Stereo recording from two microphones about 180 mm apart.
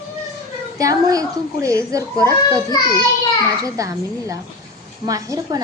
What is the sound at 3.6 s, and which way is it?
A woman's voice, 20° right (ahead or behind).